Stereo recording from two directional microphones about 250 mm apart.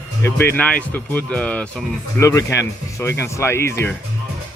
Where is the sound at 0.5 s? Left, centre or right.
Centre.